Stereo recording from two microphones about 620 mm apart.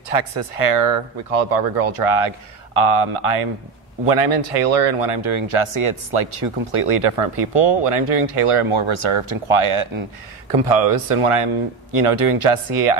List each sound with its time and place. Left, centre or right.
0.1 s speech: right